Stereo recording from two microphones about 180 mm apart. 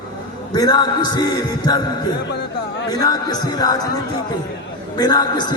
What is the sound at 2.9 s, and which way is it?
Speech, 20° left (ahead or behind).